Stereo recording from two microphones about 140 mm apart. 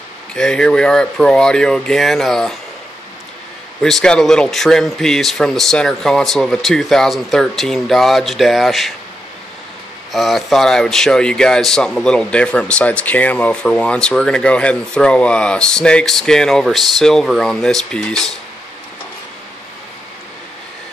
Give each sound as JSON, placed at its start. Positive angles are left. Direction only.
{"t": 0.3, "sound": "speech", "side_deg": 5}
{"t": 3.8, "sound": "speech", "side_deg": 5}
{"t": 10.1, "sound": "speech", "side_deg": 0}